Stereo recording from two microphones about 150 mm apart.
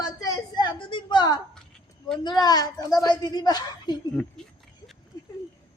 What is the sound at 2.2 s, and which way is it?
A woman's voice, 25° left (ahead or behind).